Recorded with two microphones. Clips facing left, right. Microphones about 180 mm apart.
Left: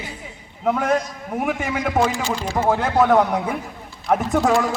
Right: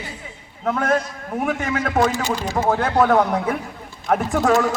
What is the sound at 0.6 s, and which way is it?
A man's voice, 10° left (ahead or behind).